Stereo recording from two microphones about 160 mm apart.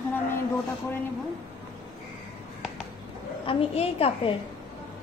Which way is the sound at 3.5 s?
35° left (ahead or behind).